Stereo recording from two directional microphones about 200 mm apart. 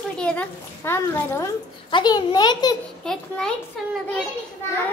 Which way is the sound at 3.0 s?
5° left (ahead or behind).